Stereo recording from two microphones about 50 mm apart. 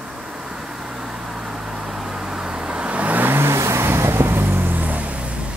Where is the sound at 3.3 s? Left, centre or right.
Right.